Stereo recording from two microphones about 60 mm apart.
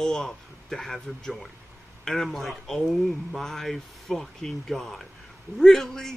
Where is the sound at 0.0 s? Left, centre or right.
Centre.